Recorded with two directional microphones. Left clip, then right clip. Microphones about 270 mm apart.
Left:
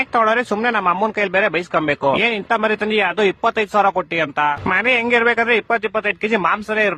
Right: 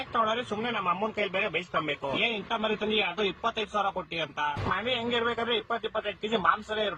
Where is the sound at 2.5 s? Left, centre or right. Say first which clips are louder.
Left 11 dB; left.